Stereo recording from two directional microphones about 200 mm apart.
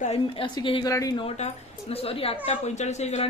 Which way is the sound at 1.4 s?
30° left (ahead or behind).